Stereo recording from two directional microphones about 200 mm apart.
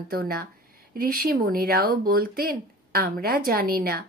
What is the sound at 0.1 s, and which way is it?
Speech, 50° right (ahead or behind).